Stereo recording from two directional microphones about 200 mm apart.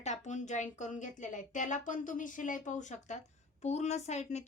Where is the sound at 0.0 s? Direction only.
35° left (ahead or behind).